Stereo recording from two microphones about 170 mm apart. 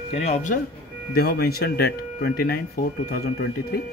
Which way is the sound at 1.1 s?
65° left (ahead or behind).